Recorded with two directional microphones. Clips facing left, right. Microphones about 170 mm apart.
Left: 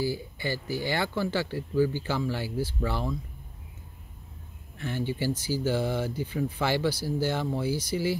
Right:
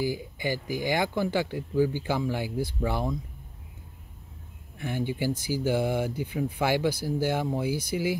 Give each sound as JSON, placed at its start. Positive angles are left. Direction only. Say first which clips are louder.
{"t": 0.0, "sound": "speech", "louder": "right 1 dB", "side_deg": -15}
{"t": 4.7, "sound": "speech", "louder": "right 1 dB", "side_deg": -15}